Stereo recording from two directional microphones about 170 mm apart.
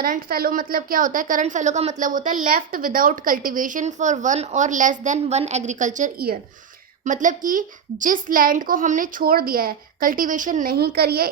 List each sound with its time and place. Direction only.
0.0 s a woman's voice: 60° right (ahead or behind)